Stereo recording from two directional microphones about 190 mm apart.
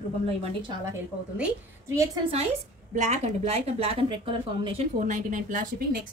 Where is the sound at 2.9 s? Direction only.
35° right (ahead or behind).